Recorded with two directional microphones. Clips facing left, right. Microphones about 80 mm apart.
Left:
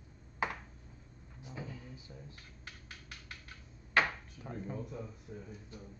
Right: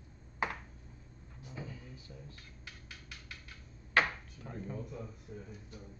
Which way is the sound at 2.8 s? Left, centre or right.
Left.